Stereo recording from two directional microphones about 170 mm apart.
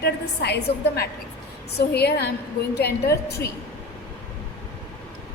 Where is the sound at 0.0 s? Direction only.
75° left (ahead or behind).